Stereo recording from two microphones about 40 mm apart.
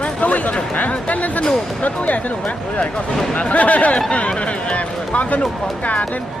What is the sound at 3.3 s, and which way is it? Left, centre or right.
Speech, left.